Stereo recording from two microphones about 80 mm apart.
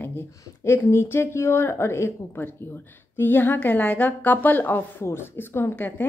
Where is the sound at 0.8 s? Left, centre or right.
Left.